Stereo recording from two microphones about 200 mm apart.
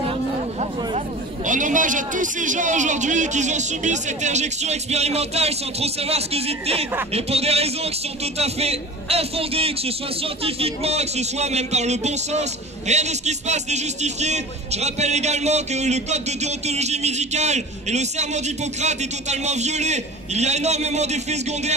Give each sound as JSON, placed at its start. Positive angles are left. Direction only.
{"t": 0.6, "sound": "speech", "side_deg": -35}